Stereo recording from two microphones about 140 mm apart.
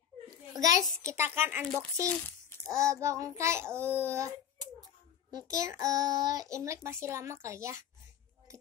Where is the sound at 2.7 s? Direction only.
20° right (ahead or behind).